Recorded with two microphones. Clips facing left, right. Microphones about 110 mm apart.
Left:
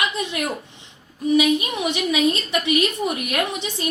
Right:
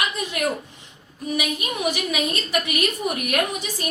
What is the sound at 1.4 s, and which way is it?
A woman's voice, 25° left (ahead or behind).